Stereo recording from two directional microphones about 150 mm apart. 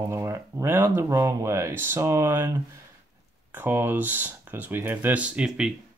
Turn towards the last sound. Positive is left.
turn(degrees=-5)  # may be behind; listen again after turning